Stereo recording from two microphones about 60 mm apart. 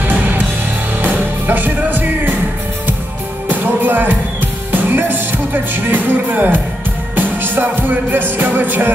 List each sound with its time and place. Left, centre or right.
0.0 s music: right
3.4 s music: right